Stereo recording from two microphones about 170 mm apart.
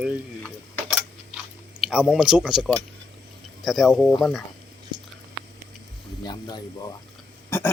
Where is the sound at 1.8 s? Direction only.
5° right (ahead or behind).